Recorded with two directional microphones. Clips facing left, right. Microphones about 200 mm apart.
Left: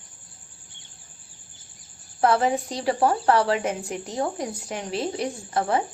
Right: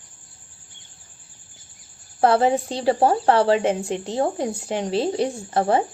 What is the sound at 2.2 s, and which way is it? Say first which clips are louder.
Speech: right 3 dB; 30° right (ahead or behind).